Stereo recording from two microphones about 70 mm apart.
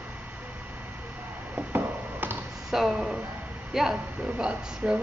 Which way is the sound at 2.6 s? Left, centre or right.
Centre.